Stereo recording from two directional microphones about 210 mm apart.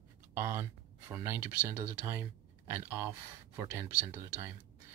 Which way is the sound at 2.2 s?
15° right (ahead or behind).